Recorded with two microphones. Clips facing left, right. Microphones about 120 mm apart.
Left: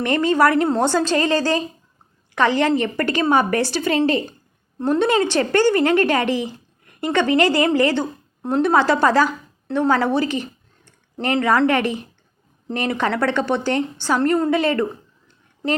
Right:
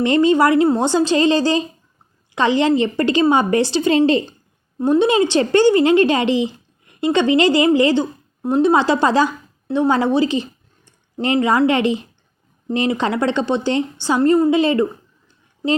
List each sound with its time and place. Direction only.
0.0 s a woman's voice: 20° right (ahead or behind)